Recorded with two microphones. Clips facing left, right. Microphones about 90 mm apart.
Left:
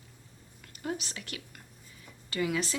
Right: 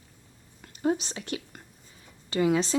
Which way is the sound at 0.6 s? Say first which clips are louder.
Right 9 dB; 30° right (ahead or behind).